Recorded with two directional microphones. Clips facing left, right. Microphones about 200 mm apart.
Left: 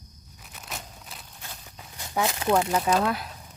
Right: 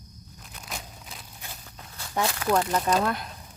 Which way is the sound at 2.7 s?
5° left (ahead or behind).